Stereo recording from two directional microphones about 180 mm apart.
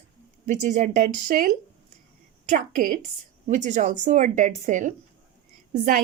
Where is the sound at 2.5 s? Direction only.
50° right (ahead or behind).